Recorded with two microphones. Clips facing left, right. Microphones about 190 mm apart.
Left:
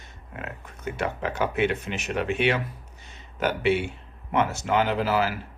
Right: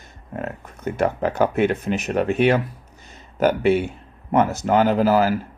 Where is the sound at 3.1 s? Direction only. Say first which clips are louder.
Right 8 dB; 45° right (ahead or behind).